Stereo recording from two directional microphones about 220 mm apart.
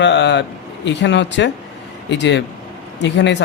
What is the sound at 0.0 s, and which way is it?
A man's voice, 55° left (ahead or behind).